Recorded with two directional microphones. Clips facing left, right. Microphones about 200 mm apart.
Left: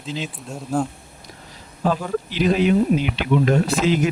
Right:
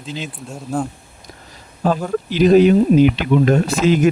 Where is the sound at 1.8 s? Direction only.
45° right (ahead or behind).